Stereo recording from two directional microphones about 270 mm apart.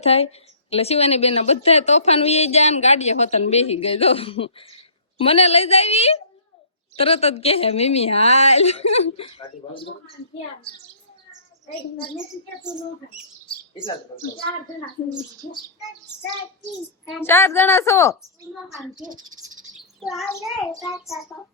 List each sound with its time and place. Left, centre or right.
0.0 s a woman's voice: left
17.1 s a woman's voice: centre
19.7 s chirp: centre
20.4 s child singing: centre